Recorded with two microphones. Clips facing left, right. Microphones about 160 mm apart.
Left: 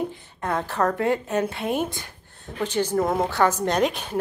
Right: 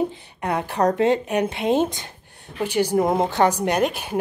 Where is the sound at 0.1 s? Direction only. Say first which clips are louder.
Right 2 dB; 20° right (ahead or behind).